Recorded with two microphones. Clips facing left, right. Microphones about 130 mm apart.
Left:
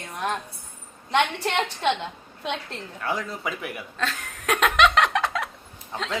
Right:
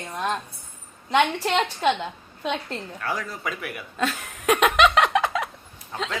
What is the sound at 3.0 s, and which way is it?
Speech, 25° left (ahead or behind).